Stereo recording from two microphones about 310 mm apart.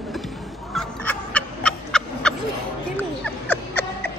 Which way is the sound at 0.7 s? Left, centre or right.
Centre.